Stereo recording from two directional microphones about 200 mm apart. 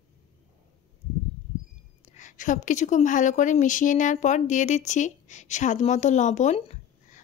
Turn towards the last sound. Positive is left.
turn(degrees=35)  # may be behind; listen again after turning